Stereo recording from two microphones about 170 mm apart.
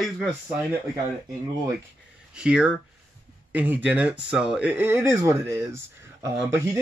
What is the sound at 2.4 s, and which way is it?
Speech, 5° right (ahead or behind).